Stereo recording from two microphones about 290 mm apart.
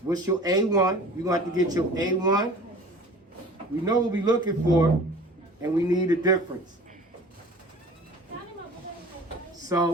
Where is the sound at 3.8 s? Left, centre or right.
Centre.